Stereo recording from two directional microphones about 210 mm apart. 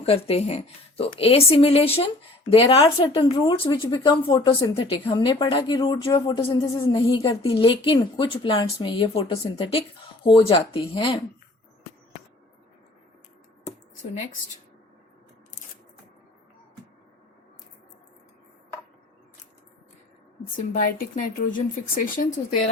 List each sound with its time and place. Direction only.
0.0 s speech: 30° left (ahead or behind)
20.6 s a woman's voice: 40° left (ahead or behind)